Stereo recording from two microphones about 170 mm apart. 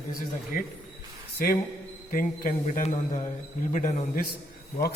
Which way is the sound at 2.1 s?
55° left (ahead or behind).